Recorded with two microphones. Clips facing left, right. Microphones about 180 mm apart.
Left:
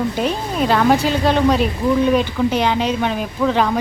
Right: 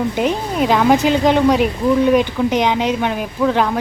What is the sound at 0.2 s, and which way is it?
Speech, 15° right (ahead or behind).